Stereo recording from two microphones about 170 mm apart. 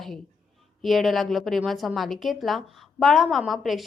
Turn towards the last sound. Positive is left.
turn(degrees=0)  # may be behind; listen again after turning